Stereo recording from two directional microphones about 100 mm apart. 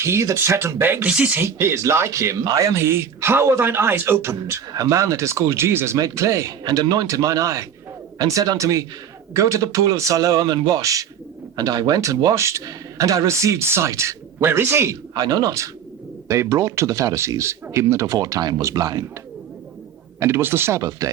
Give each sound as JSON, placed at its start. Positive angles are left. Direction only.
{"t": 0.0, "sound": "speech", "side_deg": -30}
{"t": 1.5, "sound": "speech", "side_deg": -25}
{"t": 15.1, "sound": "speech", "side_deg": -40}
{"t": 20.1, "sound": "speech", "side_deg": -25}